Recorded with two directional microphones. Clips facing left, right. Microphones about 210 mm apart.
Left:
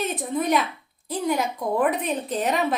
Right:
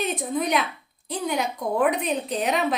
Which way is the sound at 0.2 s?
Centre (ahead or behind).